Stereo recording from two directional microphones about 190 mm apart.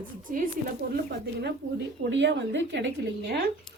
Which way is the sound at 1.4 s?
60° right (ahead or behind).